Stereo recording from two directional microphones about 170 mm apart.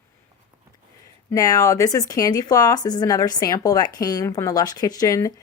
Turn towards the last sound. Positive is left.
turn(degrees=20)  # may be behind; listen again after turning